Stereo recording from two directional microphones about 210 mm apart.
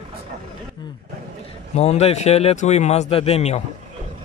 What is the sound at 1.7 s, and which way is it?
Speech, 30° left (ahead or behind).